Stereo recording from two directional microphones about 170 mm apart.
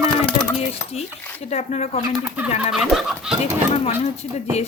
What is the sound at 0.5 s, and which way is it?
Speech, 35° left (ahead or behind).